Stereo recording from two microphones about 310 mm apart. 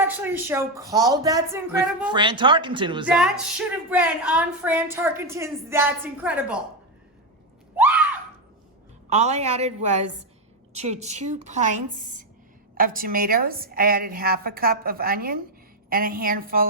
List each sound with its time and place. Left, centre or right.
0.0 s a woman's voice: centre
3.1 s a woman's voice: centre
7.8 s a sound: centre
9.0 s a woman's voice: right